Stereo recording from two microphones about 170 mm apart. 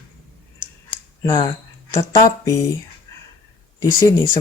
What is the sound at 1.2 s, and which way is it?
Speech, 25° left (ahead or behind).